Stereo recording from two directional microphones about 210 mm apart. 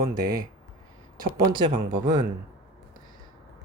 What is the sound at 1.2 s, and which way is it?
Speech, 20° right (ahead or behind).